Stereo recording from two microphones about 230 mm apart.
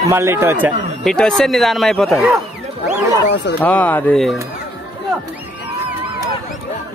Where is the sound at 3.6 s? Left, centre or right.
Centre.